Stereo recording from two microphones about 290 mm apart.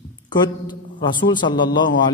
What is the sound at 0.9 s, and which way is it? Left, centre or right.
Speech, centre.